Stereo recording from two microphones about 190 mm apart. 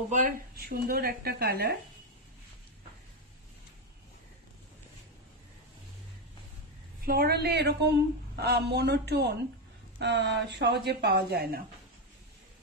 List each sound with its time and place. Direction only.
0.1 s speech: 40° right (ahead or behind)
0.7 s speech: 55° right (ahead or behind)
7.0 s speech: 55° right (ahead or behind)